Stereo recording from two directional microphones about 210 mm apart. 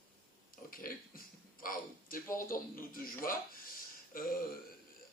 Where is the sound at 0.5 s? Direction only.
40° left (ahead or behind).